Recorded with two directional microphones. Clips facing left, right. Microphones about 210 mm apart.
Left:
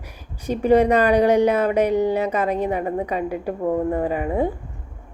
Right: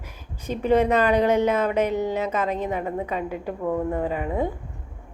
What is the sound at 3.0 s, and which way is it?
Speech, 45° left (ahead or behind).